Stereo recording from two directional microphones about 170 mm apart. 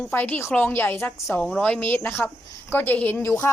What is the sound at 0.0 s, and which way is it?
Speech, 10° left (ahead or behind).